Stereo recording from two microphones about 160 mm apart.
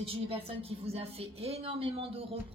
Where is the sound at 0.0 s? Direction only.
35° right (ahead or behind).